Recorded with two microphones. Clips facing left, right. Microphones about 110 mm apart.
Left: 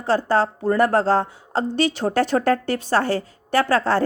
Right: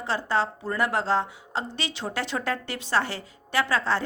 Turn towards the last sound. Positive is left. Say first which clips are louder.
# left 6 dB
turn(degrees=45)  # may be behind; listen again after turning